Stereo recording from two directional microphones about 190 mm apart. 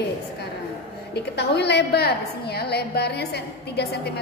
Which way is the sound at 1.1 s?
60° left (ahead or behind).